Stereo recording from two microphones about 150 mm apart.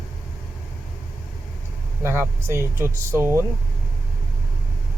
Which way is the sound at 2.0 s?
15° right (ahead or behind).